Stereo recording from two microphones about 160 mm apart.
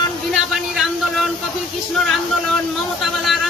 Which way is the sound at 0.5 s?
Centre (ahead or behind).